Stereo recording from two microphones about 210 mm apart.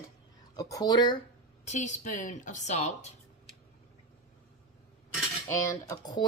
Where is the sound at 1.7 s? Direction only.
35° left (ahead or behind).